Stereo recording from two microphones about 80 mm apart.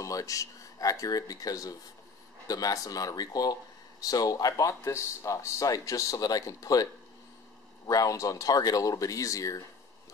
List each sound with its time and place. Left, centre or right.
0.0 s speech: left